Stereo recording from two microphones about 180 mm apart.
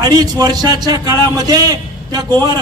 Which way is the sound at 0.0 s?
20° right (ahead or behind).